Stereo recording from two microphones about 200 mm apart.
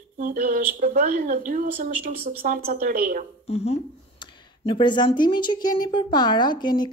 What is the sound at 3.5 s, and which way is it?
Speech, 30° left (ahead or behind).